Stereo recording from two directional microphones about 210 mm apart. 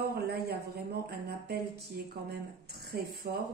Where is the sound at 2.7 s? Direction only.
50° right (ahead or behind).